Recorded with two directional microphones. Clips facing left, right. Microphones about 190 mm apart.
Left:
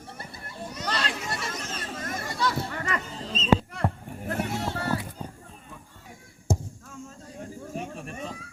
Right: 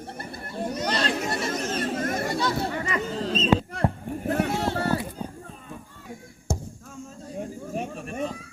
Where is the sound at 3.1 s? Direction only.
75° right (ahead or behind).